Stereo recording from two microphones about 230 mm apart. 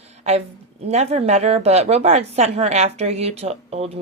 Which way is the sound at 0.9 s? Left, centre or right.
Right.